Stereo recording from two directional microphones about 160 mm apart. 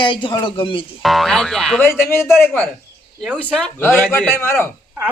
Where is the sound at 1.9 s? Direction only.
15° left (ahead or behind).